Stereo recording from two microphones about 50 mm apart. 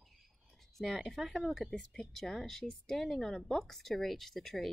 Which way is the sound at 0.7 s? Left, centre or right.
Centre.